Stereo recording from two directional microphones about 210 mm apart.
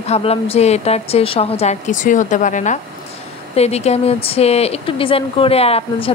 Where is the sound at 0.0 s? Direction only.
30° left (ahead or behind).